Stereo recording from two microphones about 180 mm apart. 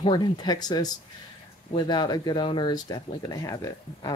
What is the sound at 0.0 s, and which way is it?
Speech, 25° left (ahead or behind).